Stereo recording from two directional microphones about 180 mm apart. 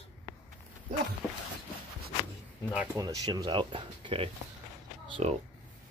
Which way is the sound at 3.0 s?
20° right (ahead or behind).